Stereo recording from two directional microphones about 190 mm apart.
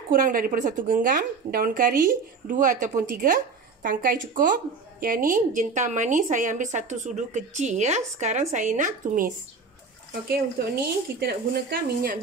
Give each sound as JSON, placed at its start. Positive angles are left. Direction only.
{"t": 0.1, "sound": "a woman's voice", "side_deg": -45}
{"t": 10.6, "sound": "speech", "side_deg": -60}